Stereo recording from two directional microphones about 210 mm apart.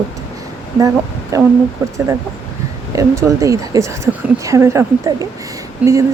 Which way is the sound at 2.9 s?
15° right (ahead or behind).